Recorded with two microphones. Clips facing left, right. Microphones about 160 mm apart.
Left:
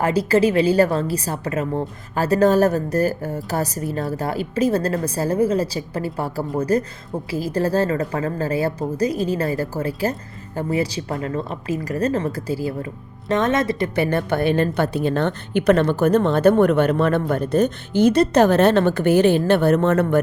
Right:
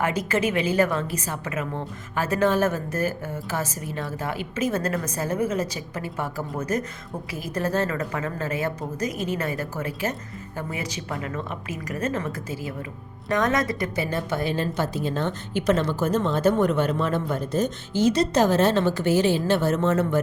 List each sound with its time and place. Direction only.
0.0 s a woman's voice: 35° left (ahead or behind)
13.9 s a woman's voice: 60° left (ahead or behind)